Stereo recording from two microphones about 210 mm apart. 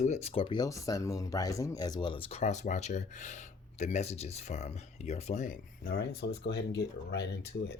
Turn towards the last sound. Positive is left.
turn(degrees=55)  # may be behind; listen again after turning